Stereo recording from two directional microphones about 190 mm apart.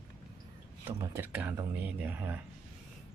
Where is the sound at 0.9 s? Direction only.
10° right (ahead or behind).